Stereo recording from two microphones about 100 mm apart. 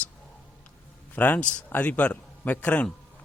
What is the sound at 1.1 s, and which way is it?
Speech, 15° left (ahead or behind).